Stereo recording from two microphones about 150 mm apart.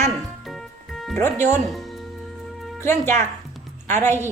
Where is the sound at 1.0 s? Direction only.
10° left (ahead or behind).